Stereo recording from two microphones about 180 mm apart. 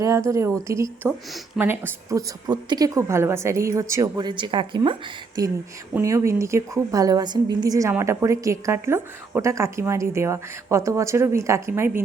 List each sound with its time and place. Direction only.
0.0 s a woman's voice: 15° right (ahead or behind)
5.9 s a woman's voice: 15° right (ahead or behind)